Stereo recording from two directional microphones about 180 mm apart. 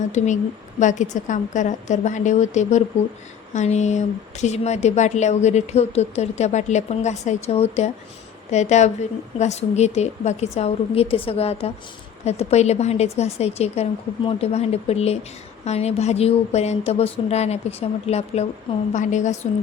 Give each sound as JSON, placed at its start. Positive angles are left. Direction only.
{"t": 0.1, "sound": "speech", "side_deg": 40}